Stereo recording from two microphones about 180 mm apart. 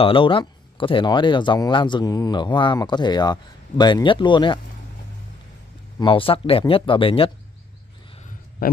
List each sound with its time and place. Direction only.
0.0 s speech: 30° left (ahead or behind)
5.9 s speech: 30° left (ahead or behind)